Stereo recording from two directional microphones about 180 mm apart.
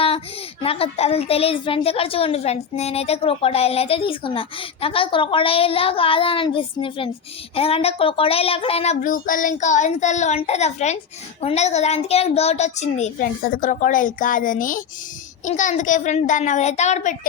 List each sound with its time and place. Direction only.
0.6 s a woman's voice: 30° left (ahead or behind)
9.0 s a woman's voice: 50° left (ahead or behind)